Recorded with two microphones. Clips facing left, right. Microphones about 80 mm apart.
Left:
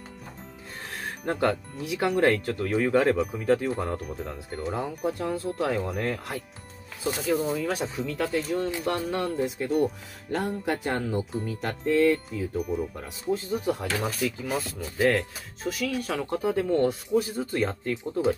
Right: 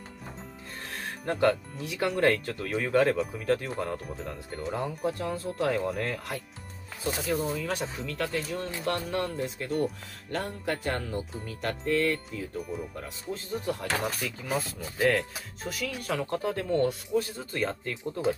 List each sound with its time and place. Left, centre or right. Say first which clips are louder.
1.2 s speech: right 1 dB; centre
7.0 s speech: left 3 dB; centre
14.0 s speech: left 4 dB; centre
15.6 s speech: left 6 dB; centre
16.3 s speech: left 4 dB; centre